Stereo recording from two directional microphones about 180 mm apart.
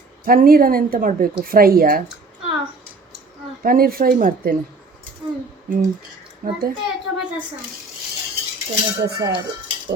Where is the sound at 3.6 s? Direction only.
55° right (ahead or behind).